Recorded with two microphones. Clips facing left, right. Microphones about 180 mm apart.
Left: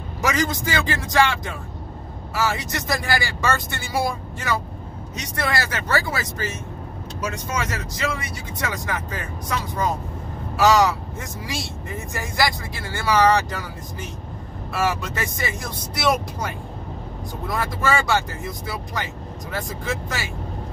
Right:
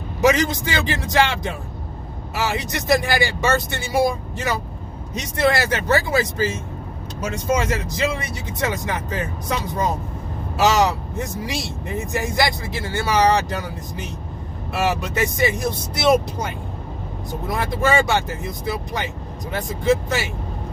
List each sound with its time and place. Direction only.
0.3 s speech: 20° right (ahead or behind)
17.6 s speech: 20° right (ahead or behind)
19.5 s speech: 20° right (ahead or behind)